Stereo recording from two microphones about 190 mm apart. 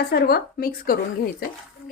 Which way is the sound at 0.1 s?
55° left (ahead or behind).